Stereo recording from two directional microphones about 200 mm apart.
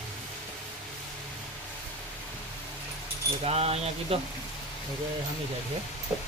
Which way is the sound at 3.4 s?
30° right (ahead or behind).